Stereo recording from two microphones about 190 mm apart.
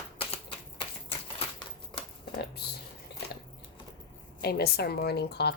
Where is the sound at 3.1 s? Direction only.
60° left (ahead or behind).